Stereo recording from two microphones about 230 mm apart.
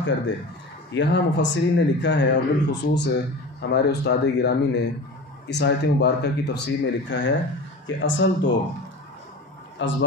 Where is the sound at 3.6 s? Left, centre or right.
Left.